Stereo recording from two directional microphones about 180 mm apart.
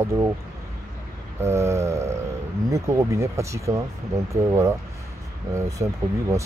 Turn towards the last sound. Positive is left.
turn(degrees=-15)  # may be behind; listen again after turning